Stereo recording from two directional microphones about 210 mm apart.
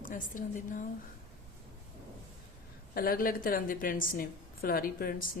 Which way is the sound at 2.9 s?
45° left (ahead or behind).